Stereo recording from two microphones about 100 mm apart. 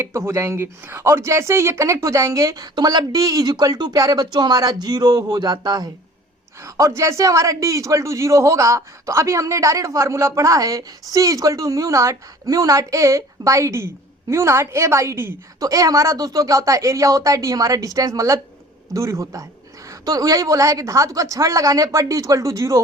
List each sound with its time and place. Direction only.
0.0 s speech: 30° right (ahead or behind)
2.7 s speech: 45° right (ahead or behind)
6.6 s a man's voice: 30° right (ahead or behind)
15.6 s a man's voice: 35° right (ahead or behind)